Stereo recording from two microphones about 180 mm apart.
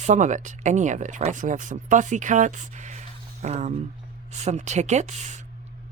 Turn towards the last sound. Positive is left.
turn(degrees=-40)  # may be behind; listen again after turning